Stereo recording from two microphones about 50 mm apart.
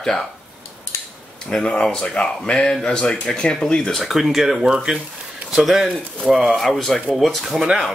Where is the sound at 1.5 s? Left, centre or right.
Centre.